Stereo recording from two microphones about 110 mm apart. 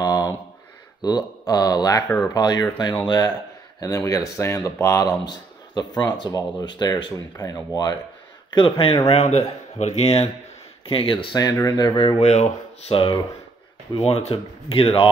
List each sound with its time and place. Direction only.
0.0 s a sound: 30° left (ahead or behind)
1.0 s speech: 35° left (ahead or behind)
2.0 s speech: 15° left (ahead or behind)
2.3 s speech: 40° left (ahead or behind)
5.3 s speech: 40° left (ahead or behind)
8.5 s speech: 50° left (ahead or behind)
9.1 s speech: 80° left
10.9 s speech: 55° left (ahead or behind)
11.3 s speech: 35° left (ahead or behind)
12.2 s speech: 85° left
12.9 s speech: 50° left (ahead or behind)
13.9 s speech: 65° left (ahead or behind)